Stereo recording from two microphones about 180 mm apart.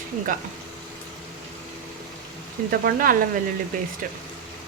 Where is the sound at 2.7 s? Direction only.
50° right (ahead or behind).